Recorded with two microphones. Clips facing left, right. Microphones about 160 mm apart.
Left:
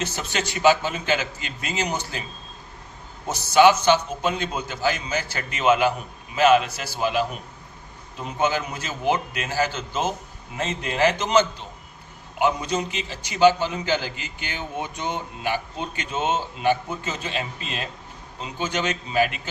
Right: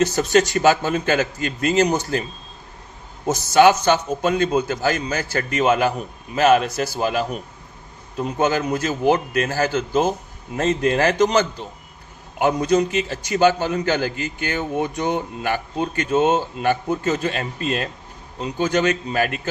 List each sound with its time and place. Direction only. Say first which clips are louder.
0.0 s a man's voice: right 11 dB; 40° right (ahead or behind)
3.2 s a man's voice: right 2 dB; 45° right (ahead or behind)
8.4 s a man's voice: right 4 dB; 45° right (ahead or behind)